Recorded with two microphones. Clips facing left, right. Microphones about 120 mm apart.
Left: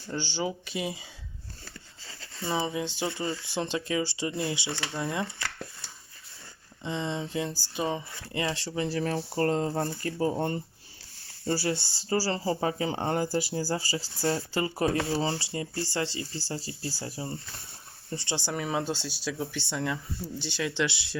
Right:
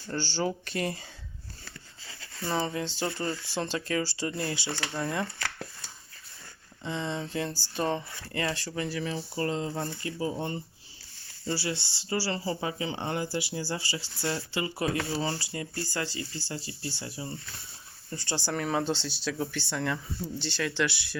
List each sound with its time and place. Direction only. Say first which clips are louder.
0.1 s speech: right 1 dB; 15° left (ahead or behind)
2.3 s speech: even; centre (ahead or behind)
2.6 s speech: even; 15° left (ahead or behind)
3.0 s speech: right 1 dB; centre (ahead or behind)
3.4 s speech: left 1 dB; 20° left (ahead or behind)
4.8 s speech: even; centre (ahead or behind)
6.8 s speech: left 1 dB; 20° left (ahead or behind)
8.3 s speech: left 1 dB; 20° left (ahead or behind)
9.0 s speech: left 4 dB; 55° left (ahead or behind)
9.7 s speech: left 4 dB; 25° left (ahead or behind)
10.0 s speech: left 4 dB; 50° left (ahead or behind); by 18.5 s 25° left (ahead or behind)
18.5 s speech: right 2 dB; 5° left (ahead or behind)
20.4 s speech: even; 15° left (ahead or behind)